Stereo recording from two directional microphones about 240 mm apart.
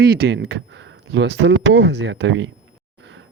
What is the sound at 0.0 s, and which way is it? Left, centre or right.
Speech, right.